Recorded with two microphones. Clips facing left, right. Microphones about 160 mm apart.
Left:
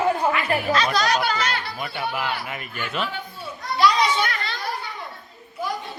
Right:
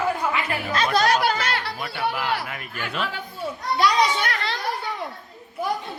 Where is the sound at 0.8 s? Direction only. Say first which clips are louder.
Right 1 dB; 50° right (ahead or behind).